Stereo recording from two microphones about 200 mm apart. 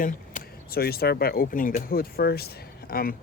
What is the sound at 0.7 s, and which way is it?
Speech, 50° left (ahead or behind).